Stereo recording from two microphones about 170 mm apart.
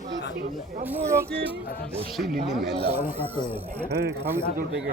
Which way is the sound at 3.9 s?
80° right.